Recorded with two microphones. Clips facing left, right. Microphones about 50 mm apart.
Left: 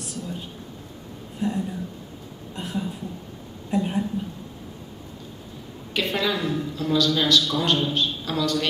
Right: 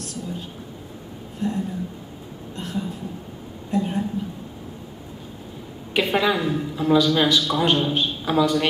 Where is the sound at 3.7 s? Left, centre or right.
Centre.